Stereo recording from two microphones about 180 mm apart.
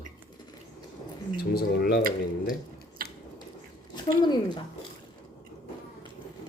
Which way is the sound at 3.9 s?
25° left (ahead or behind).